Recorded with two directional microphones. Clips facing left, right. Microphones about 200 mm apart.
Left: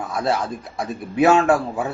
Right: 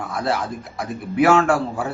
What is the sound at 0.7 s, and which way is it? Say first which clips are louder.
Speech: even; 25° left (ahead or behind).